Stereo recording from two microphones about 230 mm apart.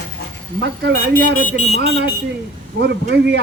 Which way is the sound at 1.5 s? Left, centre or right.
Left.